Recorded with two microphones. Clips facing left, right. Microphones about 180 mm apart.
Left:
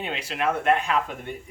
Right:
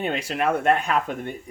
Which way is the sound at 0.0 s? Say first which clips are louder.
Right 3 dB; 45° right (ahead or behind).